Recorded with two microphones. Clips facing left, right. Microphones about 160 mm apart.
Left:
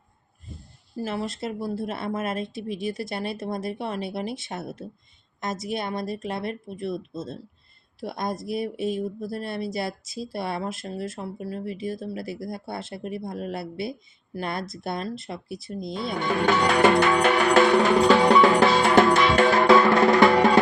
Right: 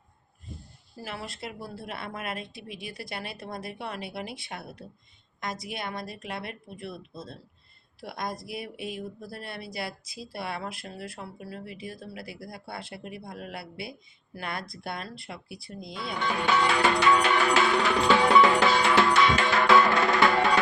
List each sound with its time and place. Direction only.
1.4 s speech: 25° left (ahead or behind)
16.6 s music: 50° left (ahead or behind)
19.8 s music: 30° left (ahead or behind)